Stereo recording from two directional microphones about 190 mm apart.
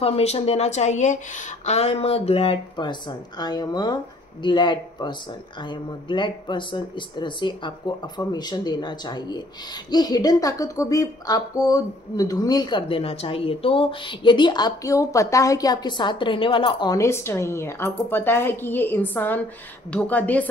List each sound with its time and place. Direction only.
0.0 s a woman's voice: 35° left (ahead or behind); by 20.4 s 10° left (ahead or behind)